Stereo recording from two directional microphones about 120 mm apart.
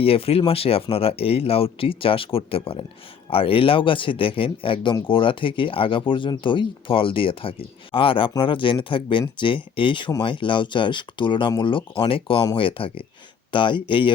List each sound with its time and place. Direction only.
0.0 s speech: 50° left (ahead or behind)